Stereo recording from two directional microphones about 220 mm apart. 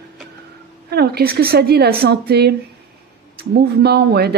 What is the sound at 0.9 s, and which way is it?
Speech, 45° right (ahead or behind).